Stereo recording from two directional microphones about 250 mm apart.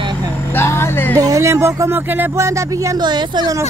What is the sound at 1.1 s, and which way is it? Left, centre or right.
Speech, centre.